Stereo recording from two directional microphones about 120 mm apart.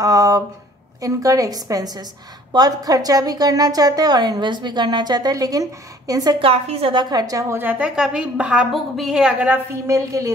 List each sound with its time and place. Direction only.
0.0 s a sound: 30° right (ahead or behind)
1.0 s a woman's voice: 30° right (ahead or behind)
6.4 s a woman's voice: 55° right (ahead or behind); by 9.6 s 10° right (ahead or behind)
9.8 s a woman's voice: 25° right (ahead or behind)